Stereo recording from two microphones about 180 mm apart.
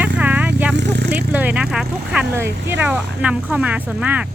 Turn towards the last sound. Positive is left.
turn(degrees=-10)  # may be behind; listen again after turning